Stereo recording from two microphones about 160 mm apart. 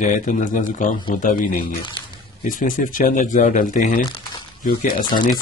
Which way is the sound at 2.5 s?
55° left (ahead or behind).